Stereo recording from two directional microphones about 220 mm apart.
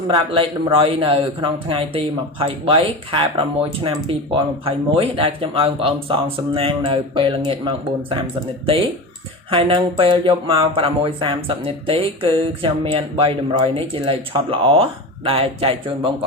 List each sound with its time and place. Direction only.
0.1 s speech: 25° right (ahead or behind)